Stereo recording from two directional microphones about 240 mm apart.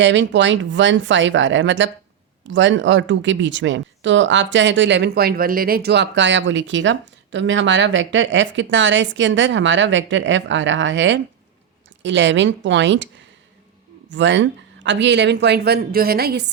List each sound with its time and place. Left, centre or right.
0.0 s speech: right
14.1 s speech: right